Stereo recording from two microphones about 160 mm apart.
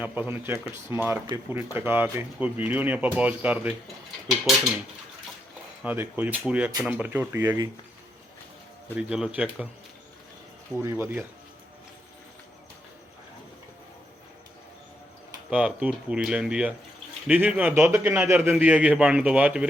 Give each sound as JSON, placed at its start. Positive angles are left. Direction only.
{"t": 0.0, "sound": "speech", "side_deg": -10}
{"t": 5.8, "sound": "speech", "side_deg": -10}
{"t": 9.0, "sound": "speech", "side_deg": -5}
{"t": 10.8, "sound": "speech", "side_deg": -15}
{"t": 15.4, "sound": "speech", "side_deg": -5}